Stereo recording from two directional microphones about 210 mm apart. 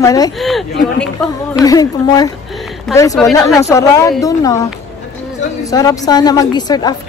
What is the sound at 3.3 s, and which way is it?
A woman's voice, 15° left (ahead or behind).